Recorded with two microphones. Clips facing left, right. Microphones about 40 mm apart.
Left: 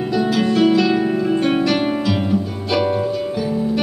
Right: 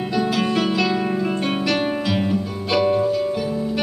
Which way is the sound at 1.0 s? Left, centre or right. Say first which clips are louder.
Left 4 dB; centre.